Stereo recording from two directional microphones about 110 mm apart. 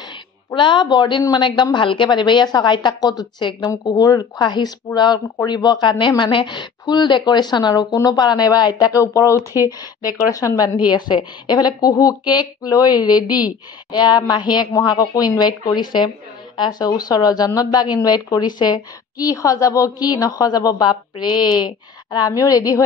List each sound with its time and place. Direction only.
0.6 s a woman's voice: 45° left (ahead or behind)